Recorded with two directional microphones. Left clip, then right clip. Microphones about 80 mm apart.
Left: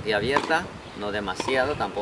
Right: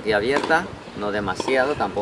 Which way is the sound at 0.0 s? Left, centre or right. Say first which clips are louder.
Right 3 dB; centre.